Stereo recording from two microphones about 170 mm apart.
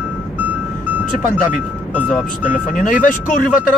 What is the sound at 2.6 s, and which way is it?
Speech, 50° left (ahead or behind).